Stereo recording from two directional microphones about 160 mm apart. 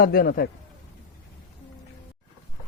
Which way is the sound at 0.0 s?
70° left (ahead or behind).